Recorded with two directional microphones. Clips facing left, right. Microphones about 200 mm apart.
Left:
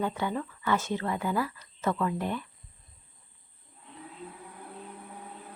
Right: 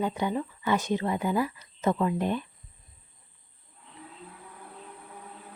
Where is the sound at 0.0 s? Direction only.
15° right (ahead or behind).